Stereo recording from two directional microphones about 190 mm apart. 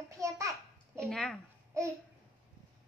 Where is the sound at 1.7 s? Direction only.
15° right (ahead or behind).